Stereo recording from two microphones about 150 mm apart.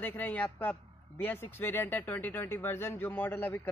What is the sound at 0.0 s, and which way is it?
A man's voice, 10° left (ahead or behind).